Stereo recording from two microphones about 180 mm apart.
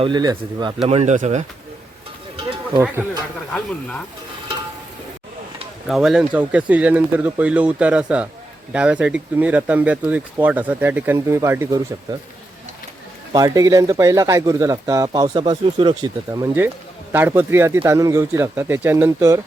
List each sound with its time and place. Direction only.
0.0 s speech: 25° right (ahead or behind)
0.9 s speech: 40° right (ahead or behind)
2.3 s a sound: 30° right (ahead or behind)
3.5 s speech: 5° left (ahead or behind)
5.9 s speech: centre (ahead or behind)
13.3 s speech: 20° right (ahead or behind)